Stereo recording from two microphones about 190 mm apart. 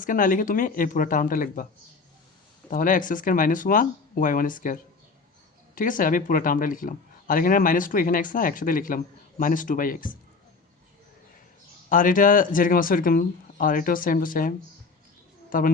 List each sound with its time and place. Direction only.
0.0 s speech: 45° left (ahead or behind)
2.6 s speech: 45° left (ahead or behind)
11.9 s speech: 45° left (ahead or behind)